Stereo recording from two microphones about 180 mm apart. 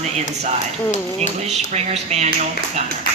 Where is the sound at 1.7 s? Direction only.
40° right (ahead or behind).